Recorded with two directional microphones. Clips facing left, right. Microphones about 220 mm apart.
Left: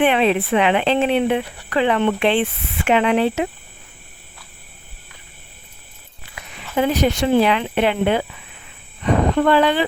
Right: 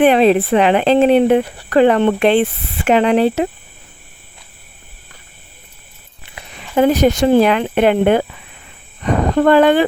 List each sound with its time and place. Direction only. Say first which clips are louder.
0.0 s speech: right 6 dB; 40° right (ahead or behind)
6.3 s a sound: right 2 dB; 30° right (ahead or behind)
6.7 s speech: right 6 dB; 45° right (ahead or behind)
9.3 s speech: right 8 dB; 45° right (ahead or behind)